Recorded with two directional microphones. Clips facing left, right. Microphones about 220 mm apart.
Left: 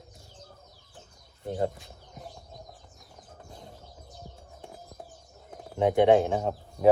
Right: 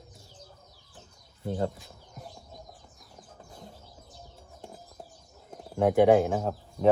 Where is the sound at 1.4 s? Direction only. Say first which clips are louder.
Left 1 dB; 15° left (ahead or behind).